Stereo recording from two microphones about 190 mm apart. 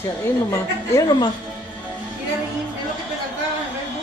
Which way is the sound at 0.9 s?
20° left (ahead or behind).